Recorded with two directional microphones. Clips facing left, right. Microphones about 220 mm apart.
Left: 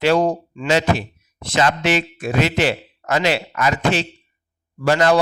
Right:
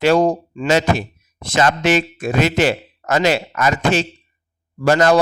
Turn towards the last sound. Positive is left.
turn(degrees=-45)  # may be behind; listen again after turning